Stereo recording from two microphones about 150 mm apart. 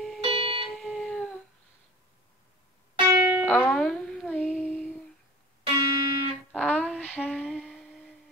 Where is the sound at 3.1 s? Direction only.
10° right (ahead or behind).